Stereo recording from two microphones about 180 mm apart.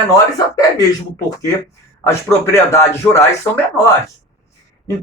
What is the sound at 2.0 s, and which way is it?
Speech, 15° left (ahead or behind).